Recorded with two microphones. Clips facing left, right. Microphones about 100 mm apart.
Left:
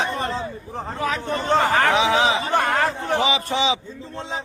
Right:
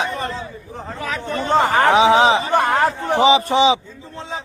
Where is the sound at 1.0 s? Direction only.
25° left (ahead or behind).